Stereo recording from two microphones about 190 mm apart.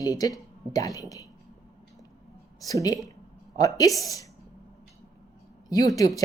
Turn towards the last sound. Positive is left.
turn(degrees=20)  # may be behind; listen again after turning